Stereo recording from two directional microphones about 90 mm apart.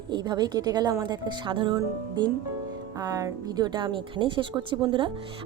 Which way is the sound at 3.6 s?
60° right (ahead or behind).